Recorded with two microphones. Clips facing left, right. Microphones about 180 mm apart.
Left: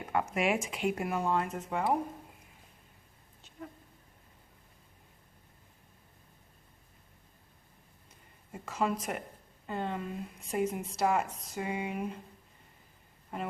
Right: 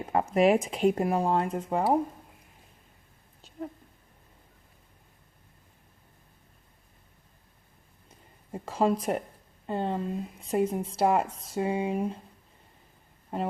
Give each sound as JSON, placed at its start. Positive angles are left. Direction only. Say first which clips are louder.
{"t": 0.0, "sound": "speech", "louder": "right 8 dB", "side_deg": -30}
{"t": 8.5, "sound": "speech", "louder": "right 6 dB", "side_deg": -35}
{"t": 13.3, "sound": "speech", "louder": "right 6 dB", "side_deg": -30}